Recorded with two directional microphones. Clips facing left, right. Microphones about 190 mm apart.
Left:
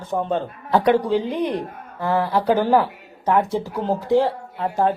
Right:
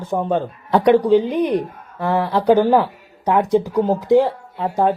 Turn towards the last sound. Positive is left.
turn(degrees=-20)  # may be behind; listen again after turning